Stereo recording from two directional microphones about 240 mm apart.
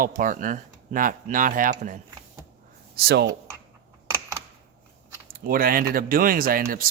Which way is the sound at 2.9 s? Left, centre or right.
Right.